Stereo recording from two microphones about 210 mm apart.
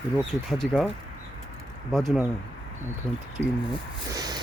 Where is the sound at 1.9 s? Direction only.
Centre (ahead or behind).